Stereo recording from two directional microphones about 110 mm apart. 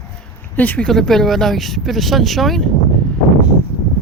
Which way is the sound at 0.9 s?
5° left (ahead or behind).